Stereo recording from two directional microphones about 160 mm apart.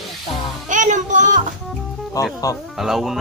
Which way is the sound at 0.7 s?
50° right (ahead or behind).